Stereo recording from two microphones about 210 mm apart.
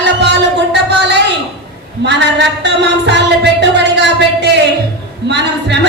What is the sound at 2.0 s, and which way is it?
Speech, 55° right (ahead or behind).